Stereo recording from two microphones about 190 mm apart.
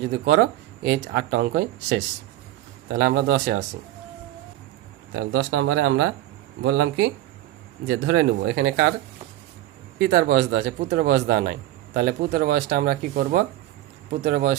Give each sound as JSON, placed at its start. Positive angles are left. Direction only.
{"t": 0.1, "sound": "speech", "side_deg": -55}
{"t": 5.1, "sound": "speech", "side_deg": -90}
{"t": 10.0, "sound": "a man's voice", "side_deg": -60}